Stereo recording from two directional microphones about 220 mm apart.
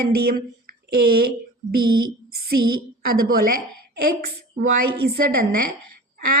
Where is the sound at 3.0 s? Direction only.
40° right (ahead or behind).